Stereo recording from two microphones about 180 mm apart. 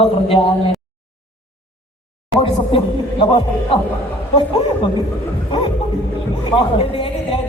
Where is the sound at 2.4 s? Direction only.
30° left (ahead or behind).